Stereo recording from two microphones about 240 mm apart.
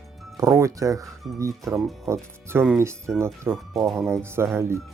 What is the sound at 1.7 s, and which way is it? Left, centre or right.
Speech, centre.